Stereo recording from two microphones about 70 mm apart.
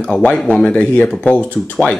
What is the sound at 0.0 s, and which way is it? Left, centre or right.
Speech, centre.